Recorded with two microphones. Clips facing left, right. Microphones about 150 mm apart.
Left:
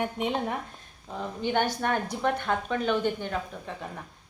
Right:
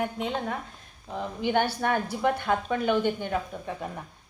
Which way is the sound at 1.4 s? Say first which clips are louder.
Right 1 dB; 10° right (ahead or behind).